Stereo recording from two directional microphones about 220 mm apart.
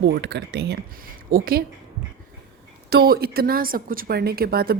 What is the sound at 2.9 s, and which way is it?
Speech, 45° right (ahead or behind).